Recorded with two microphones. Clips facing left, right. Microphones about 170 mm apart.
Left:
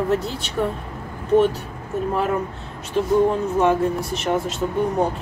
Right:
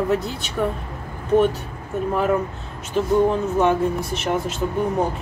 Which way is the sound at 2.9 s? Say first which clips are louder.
Even; centre (ahead or behind).